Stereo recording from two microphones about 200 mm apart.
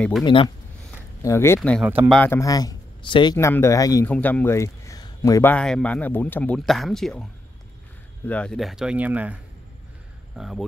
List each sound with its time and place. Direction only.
0.2 s speech: 25° left (ahead or behind)
1.2 s speech: 15° left (ahead or behind)
1.9 s a man's voice: 10° right (ahead or behind)
2.1 s speech: 10° left (ahead or behind)
8.3 s speech: 5° left (ahead or behind)